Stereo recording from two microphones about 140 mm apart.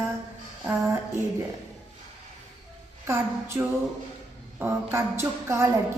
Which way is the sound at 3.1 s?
20° right (ahead or behind).